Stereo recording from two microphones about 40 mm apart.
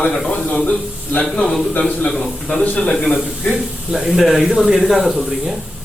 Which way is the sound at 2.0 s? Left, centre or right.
Centre.